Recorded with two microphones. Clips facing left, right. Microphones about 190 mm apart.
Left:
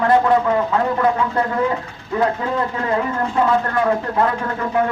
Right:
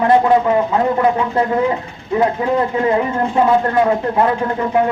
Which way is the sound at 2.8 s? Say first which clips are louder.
Right 5 dB; 20° right (ahead or behind).